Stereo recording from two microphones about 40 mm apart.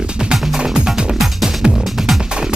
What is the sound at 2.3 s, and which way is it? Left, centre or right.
Music, right.